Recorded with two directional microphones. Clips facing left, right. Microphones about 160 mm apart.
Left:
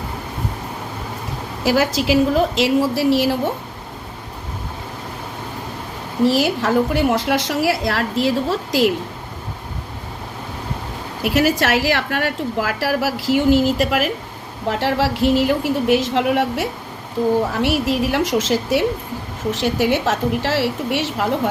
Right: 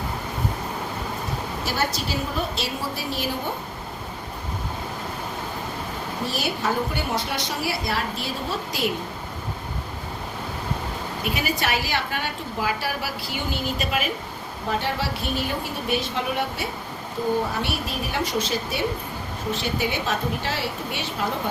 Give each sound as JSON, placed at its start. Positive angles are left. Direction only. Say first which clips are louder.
{"t": 1.6, "sound": "a woman's voice", "louder": "left 12 dB", "side_deg": 90}
{"t": 6.2, "sound": "a woman's voice", "louder": "left 10 dB", "side_deg": 90}
{"t": 11.2, "sound": "a woman's voice", "louder": "left 10 dB", "side_deg": 90}